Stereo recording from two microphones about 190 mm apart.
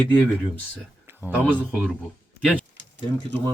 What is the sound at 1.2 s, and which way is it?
Speech, 10° right (ahead or behind).